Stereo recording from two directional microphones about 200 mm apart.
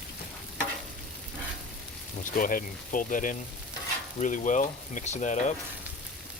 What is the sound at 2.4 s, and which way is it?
Speech, 45° left (ahead or behind).